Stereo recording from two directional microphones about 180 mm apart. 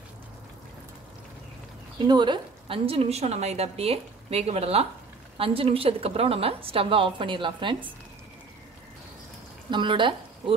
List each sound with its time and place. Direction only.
2.0 s a woman's voice: 25° right (ahead or behind)
9.7 s speech: 25° right (ahead or behind)